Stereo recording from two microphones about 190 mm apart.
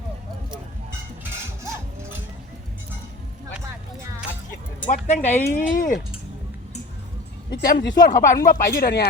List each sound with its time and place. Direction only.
1.2 s a sound: 15° right (ahead or behind)
4.9 s speech: 35° left (ahead or behind)
7.5 s speech: 65° left (ahead or behind)
8.0 s speech: 45° left (ahead or behind)